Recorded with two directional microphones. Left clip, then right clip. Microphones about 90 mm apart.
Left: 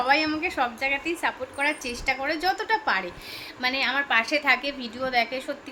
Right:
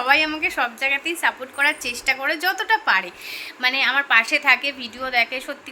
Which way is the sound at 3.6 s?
40° left (ahead or behind).